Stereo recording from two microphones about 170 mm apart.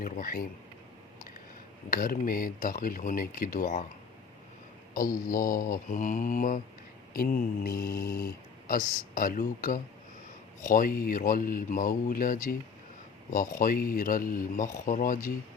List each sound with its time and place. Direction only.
0.0 s speech: 55° left (ahead or behind)
1.9 s speech: 55° left (ahead or behind)
4.9 s speech: 55° left (ahead or behind)
13.6 s speech: 55° left (ahead or behind)